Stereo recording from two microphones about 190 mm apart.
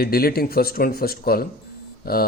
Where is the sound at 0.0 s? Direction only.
50° left (ahead or behind).